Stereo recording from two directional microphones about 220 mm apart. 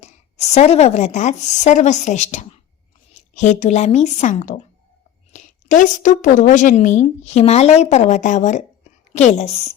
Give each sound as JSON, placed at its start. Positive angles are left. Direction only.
{"t": 0.0, "sound": "a woman's voice", "side_deg": 30}